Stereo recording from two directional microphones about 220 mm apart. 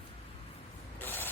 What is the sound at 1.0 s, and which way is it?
Printer, 10° left (ahead or behind).